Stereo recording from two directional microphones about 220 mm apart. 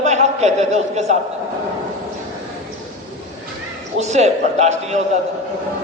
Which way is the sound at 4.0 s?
30° right (ahead or behind).